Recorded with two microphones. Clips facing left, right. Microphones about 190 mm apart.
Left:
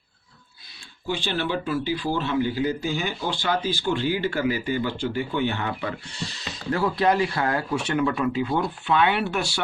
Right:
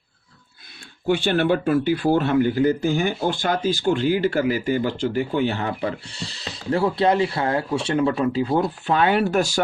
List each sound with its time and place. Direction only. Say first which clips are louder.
1.0 s speech: right 8 dB; 55° right (ahead or behind)